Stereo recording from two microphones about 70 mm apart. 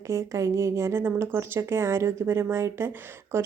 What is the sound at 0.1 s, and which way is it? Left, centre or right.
A woman's voice, right.